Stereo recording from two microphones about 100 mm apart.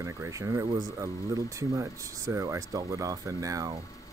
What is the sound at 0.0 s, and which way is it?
Speech, 30° right (ahead or behind).